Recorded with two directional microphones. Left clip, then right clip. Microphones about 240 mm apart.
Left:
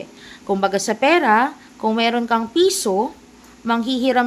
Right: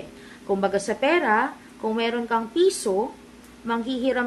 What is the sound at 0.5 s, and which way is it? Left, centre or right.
A woman's voice, left.